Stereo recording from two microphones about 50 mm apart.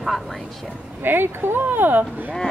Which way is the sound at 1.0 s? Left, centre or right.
Right.